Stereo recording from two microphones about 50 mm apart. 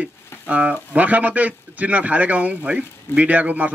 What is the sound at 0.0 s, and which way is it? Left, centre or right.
A man's voice, right.